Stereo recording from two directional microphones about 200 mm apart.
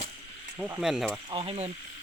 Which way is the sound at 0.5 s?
5° right (ahead or behind).